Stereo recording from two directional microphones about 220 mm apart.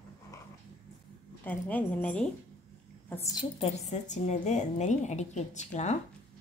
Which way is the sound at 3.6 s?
30° left (ahead or behind).